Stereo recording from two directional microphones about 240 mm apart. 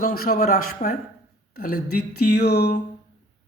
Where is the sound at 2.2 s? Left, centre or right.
Left.